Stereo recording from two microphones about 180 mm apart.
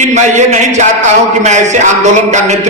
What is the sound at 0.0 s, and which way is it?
A man's voice, 40° right (ahead or behind).